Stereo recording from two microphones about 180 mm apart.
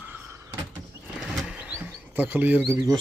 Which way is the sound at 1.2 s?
5° right (ahead or behind).